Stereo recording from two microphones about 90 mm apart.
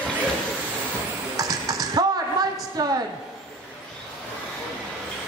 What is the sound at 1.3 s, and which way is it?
Typing, 45° right (ahead or behind).